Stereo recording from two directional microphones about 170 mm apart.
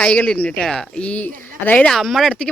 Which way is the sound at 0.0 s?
5° left (ahead or behind).